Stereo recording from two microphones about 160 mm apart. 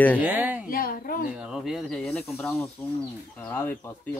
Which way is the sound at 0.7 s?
65° left (ahead or behind).